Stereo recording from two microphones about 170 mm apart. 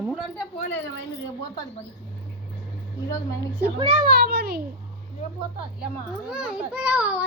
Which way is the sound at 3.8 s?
50° right (ahead or behind).